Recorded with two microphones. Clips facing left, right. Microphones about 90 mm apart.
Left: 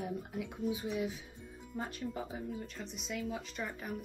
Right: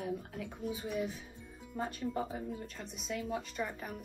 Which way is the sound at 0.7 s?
Centre (ahead or behind).